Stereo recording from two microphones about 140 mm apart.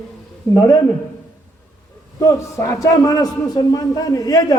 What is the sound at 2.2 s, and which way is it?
A man's voice, 25° left (ahead or behind).